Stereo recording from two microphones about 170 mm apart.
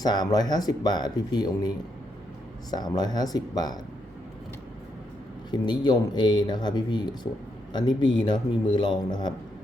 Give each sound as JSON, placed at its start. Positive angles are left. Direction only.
{"t": 0.0, "sound": "speech", "side_deg": 25}
{"t": 5.5, "sound": "speech", "side_deg": 25}